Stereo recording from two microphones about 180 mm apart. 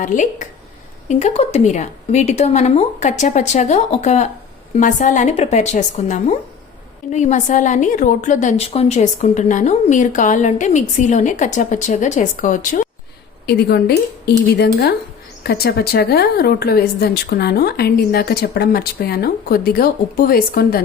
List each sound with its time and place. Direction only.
0.0 s a woman's voice: 45° left (ahead or behind)
13.5 s speech: 60° left (ahead or behind)